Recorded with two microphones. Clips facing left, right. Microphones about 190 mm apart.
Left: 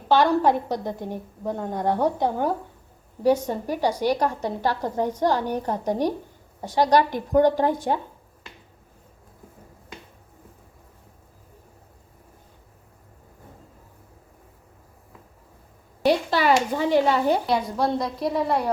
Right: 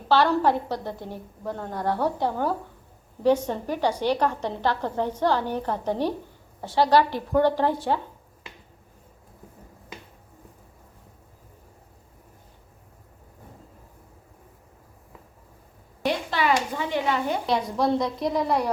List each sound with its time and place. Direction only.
0.1 s a woman's voice: 15° left (ahead or behind)
16.0 s a sound: 35° left (ahead or behind)
17.4 s a woman's voice: centre (ahead or behind)